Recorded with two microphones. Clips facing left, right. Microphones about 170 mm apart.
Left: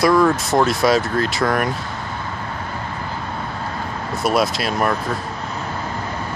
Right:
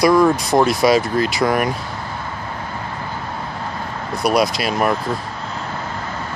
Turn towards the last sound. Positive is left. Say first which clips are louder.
# right 1 dB
turn(degrees=0)  # may be behind; listen again after turning